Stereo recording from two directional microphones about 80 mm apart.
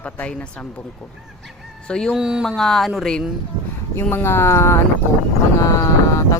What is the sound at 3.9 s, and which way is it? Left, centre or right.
Speech, left.